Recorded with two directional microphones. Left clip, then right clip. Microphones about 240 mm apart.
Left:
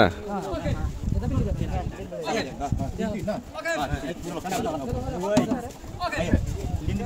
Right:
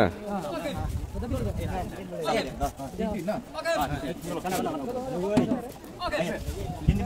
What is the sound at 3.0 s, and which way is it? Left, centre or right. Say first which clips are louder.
Sheep: even; left.